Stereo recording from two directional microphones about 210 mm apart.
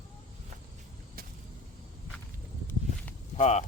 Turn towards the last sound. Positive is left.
turn(degrees=30)  # may be behind; listen again after turning